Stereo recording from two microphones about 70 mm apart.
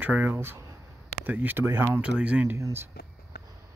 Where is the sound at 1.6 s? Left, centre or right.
Right.